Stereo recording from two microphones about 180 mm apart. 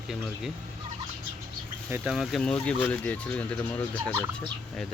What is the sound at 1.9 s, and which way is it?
Speech, 5° right (ahead or behind).